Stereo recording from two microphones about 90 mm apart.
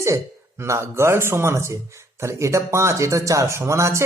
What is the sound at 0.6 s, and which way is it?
Speech, 30° right (ahead or behind).